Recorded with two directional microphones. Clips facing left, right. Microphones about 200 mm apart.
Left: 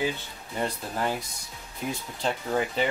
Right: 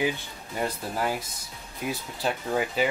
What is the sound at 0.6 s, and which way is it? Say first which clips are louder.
Speech: right 1 dB; 5° right (ahead or behind).